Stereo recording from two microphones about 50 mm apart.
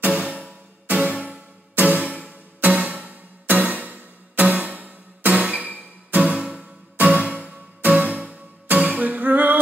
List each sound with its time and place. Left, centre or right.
0.1 s music: right
6.3 s music: centre
7.0 s music: right